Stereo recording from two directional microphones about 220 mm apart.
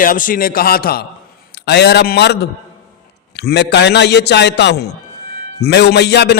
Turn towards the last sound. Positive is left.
turn(degrees=50)  # may be behind; listen again after turning